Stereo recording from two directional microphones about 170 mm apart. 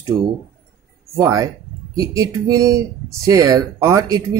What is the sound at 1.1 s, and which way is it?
Speech, 20° right (ahead or behind).